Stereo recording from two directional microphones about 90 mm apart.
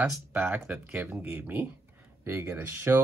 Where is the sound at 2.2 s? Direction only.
30° right (ahead or behind).